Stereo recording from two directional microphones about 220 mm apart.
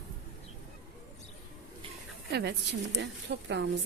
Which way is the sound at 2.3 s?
50° right (ahead or behind).